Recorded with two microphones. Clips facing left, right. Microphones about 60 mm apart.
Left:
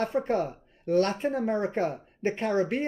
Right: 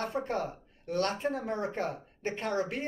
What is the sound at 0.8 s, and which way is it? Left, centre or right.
Speech, left.